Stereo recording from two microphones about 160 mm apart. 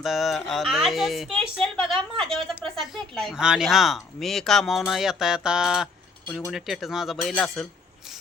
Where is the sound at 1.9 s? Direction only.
30° right (ahead or behind).